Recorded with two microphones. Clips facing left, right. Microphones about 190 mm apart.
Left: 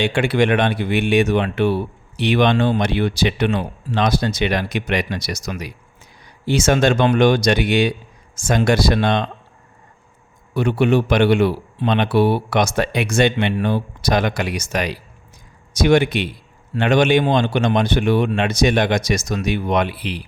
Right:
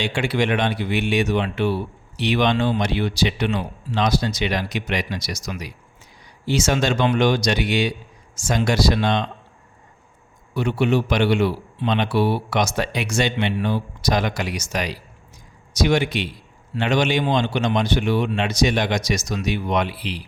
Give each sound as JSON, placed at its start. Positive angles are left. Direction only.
{"t": 0.0, "sound": "speech", "side_deg": 55}
{"t": 10.5, "sound": "speech", "side_deg": 55}